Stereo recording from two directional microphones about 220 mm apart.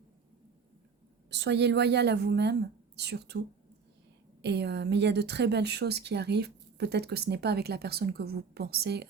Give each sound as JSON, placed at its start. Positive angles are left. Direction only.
{"t": 1.3, "sound": "speech", "side_deg": -50}
{"t": 4.4, "sound": "speech", "side_deg": -50}